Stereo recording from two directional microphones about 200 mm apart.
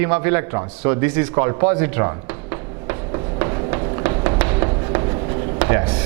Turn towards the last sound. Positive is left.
turn(degrees=-10)  # may be behind; listen again after turning